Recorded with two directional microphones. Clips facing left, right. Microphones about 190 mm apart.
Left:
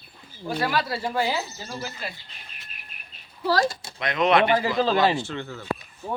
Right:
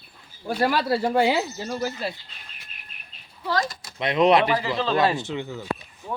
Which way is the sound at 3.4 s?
30° left (ahead or behind).